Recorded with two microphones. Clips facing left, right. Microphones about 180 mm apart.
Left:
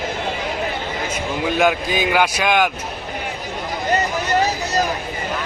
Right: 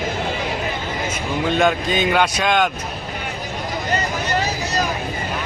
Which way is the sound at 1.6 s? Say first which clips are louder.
Left 1 dB; 5° left (ahead or behind).